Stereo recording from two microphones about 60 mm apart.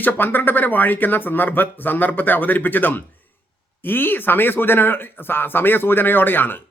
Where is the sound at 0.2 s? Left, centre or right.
Left.